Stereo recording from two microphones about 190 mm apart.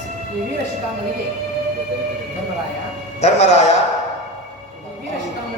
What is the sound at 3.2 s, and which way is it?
Speech, 35° left (ahead or behind).